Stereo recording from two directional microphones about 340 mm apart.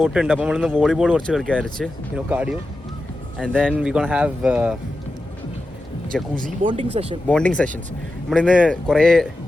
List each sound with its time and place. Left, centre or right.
0.0 s speech: centre
6.3 s speech: right
7.3 s speech: centre